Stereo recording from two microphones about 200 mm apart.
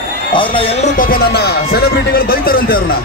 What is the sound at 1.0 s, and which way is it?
Speech, 50° left (ahead or behind).